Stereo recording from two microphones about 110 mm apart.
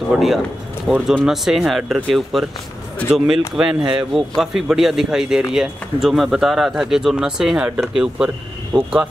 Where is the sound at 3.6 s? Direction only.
5° right (ahead or behind).